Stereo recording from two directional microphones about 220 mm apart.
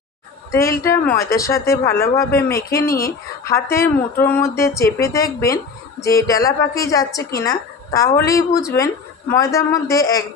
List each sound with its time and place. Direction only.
0.5 s speech: 15° left (ahead or behind)